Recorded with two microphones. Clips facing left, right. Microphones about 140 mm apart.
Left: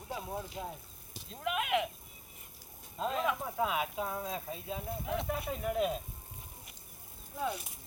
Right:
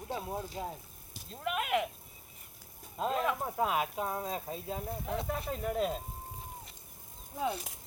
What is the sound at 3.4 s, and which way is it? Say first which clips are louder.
Speech: right 2 dB; 40° right (ahead or behind).